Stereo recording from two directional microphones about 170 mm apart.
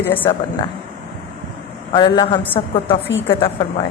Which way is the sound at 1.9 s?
25° left (ahead or behind).